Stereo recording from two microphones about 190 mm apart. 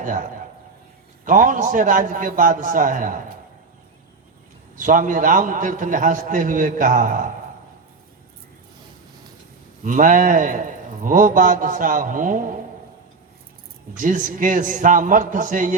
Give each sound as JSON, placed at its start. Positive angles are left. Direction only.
{"t": 0.0, "sound": "a man's voice", "side_deg": -45}
{"t": 4.8, "sound": "a man's voice", "side_deg": -45}
{"t": 9.8, "sound": "a man's voice", "side_deg": -45}
{"t": 14.0, "sound": "a man's voice", "side_deg": -45}